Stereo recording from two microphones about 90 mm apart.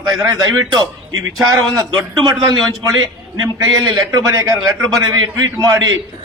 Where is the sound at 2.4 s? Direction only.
50° right (ahead or behind).